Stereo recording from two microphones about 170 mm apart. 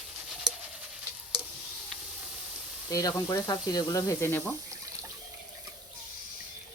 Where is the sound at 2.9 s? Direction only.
20° left (ahead or behind).